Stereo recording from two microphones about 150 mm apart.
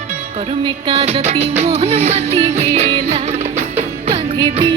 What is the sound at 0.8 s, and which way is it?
Music, 40° right (ahead or behind).